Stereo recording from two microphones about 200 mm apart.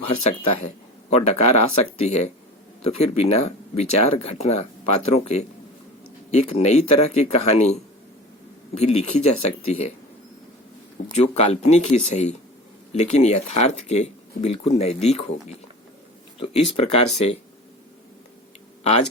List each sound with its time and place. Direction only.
0.0 s speech: 30° left (ahead or behind)
11.1 s speech: 35° left (ahead or behind)
16.4 s speech: 30° left (ahead or behind)
18.8 s speech: 30° left (ahead or behind)